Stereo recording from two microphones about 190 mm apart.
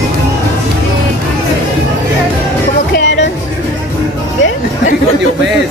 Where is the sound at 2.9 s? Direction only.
70° left (ahead or behind).